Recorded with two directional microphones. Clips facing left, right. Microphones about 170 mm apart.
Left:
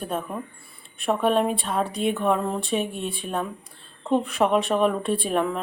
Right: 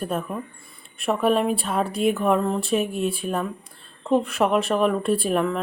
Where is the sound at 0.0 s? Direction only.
Centre (ahead or behind).